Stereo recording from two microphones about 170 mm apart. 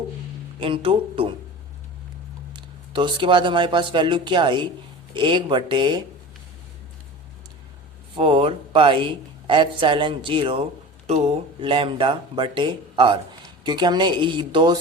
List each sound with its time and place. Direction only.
0.6 s speech: 30° right (ahead or behind)
2.5 s speech: 25° right (ahead or behind)
8.1 s speech: 30° right (ahead or behind)